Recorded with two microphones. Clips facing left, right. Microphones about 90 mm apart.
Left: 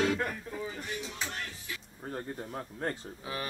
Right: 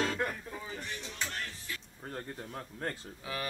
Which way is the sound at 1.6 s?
20° left (ahead or behind).